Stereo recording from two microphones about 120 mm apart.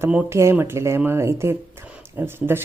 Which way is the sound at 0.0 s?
15° right (ahead or behind).